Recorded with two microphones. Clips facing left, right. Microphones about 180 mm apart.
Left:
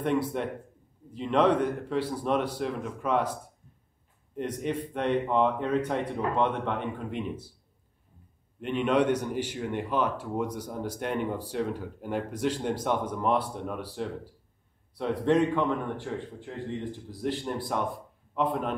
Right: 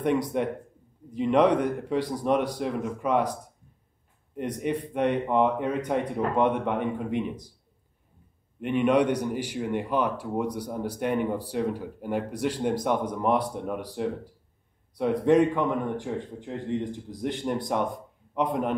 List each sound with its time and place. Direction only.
0.0 s a man's voice: 15° right (ahead or behind)
4.4 s a man's voice: 10° right (ahead or behind)
8.5 s a man's voice: 10° right (ahead or behind)